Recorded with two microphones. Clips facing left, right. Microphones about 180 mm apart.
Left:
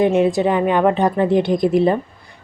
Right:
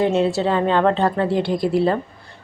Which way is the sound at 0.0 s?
15° left (ahead or behind).